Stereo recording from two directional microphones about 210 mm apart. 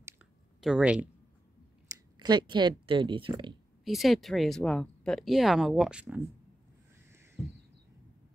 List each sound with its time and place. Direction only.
0.6 s speech: 5° right (ahead or behind)
2.1 s speech: 20° right (ahead or behind)
3.8 s speech: centre (ahead or behind)